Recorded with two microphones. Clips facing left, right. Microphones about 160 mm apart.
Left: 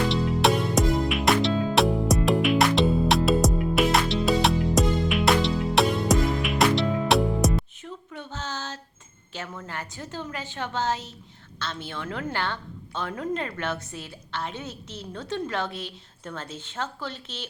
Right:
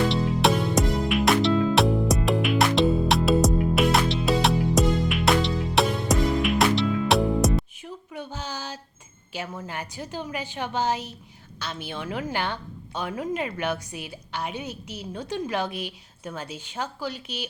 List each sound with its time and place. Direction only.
0.1 s music: centre (ahead or behind)
7.9 s a sound: 10° right (ahead or behind)
9.6 s a woman's voice: 15° right (ahead or behind)